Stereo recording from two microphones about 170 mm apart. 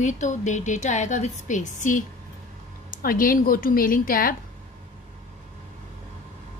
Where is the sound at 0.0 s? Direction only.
45° left (ahead or behind).